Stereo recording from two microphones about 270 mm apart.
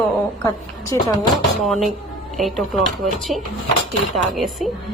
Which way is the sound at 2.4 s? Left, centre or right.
Centre.